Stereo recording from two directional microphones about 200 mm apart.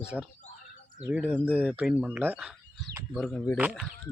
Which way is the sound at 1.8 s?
5° right (ahead or behind).